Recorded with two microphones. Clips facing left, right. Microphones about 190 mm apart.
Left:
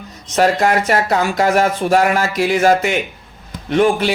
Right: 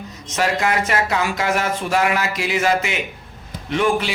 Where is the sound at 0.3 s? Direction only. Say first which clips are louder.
Left 6 dB; 45° left (ahead or behind).